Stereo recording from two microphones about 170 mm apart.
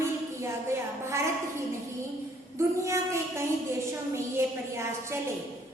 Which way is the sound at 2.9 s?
15° right (ahead or behind).